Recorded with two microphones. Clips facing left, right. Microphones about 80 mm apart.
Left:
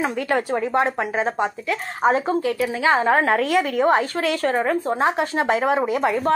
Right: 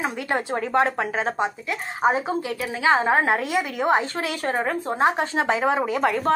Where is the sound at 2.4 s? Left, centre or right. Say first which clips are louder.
Left 3 dB; right.